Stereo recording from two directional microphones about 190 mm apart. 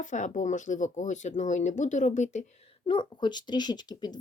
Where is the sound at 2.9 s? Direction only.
25° left (ahead or behind).